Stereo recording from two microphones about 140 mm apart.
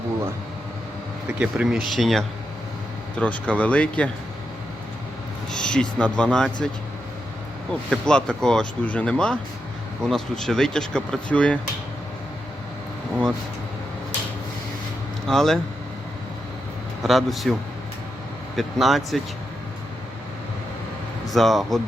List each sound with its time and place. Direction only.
1.4 s speech: 5° right (ahead or behind)
5.5 s speech: 5° left (ahead or behind)
7.7 s speech: 5° left (ahead or behind)
15.3 s speech: 5° left (ahead or behind)
17.0 s speech: centre (ahead or behind)
18.5 s speech: centre (ahead or behind)
21.2 s speech: centre (ahead or behind)